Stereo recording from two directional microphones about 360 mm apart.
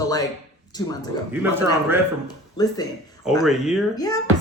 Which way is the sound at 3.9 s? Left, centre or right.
Centre.